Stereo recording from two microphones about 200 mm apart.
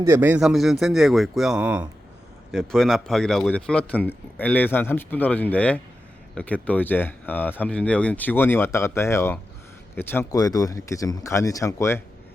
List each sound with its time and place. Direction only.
0.0 s a man's voice: 10° right (ahead or behind); by 12.0 s 15° left (ahead or behind)